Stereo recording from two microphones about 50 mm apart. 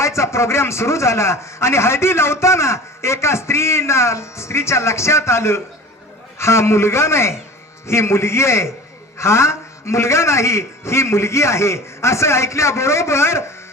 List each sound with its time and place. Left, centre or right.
0.0 s a man's voice: left